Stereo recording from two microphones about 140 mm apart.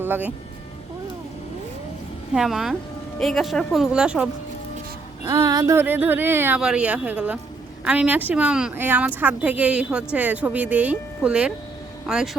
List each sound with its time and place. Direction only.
0.0 s speech: 15° right (ahead or behind)
2.3 s speech: 5° right (ahead or behind)
5.2 s speech: 25° right (ahead or behind)
5.7 s speech: 15° right (ahead or behind)